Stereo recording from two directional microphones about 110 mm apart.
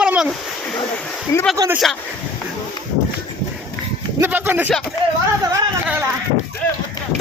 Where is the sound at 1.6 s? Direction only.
35° right (ahead or behind).